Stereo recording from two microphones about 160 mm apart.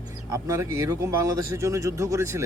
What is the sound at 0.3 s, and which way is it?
Speech, 20° right (ahead or behind).